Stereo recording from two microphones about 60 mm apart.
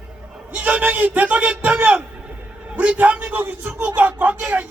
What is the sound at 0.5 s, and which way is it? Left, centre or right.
A man's voice, right.